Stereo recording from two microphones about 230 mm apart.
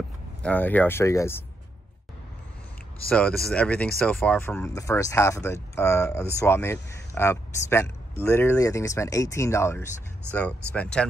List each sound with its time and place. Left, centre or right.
0.4 s speech: centre
3.1 s speech: centre